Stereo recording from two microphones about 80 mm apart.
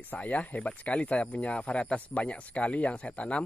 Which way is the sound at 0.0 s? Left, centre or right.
Centre.